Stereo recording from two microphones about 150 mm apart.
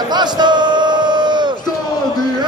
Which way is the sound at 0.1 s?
30° right (ahead or behind).